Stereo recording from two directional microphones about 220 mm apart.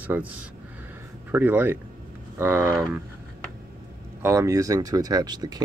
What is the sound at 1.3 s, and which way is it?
Speech, 10° right (ahead or behind).